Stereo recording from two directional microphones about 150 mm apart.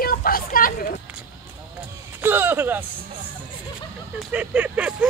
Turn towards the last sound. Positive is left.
turn(degrees=-10)  # may be behind; listen again after turning